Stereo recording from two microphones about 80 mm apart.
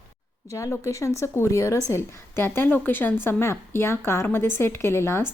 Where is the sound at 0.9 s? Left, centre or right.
Left.